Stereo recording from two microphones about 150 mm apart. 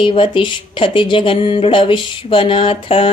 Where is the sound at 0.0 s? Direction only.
35° left (ahead or behind).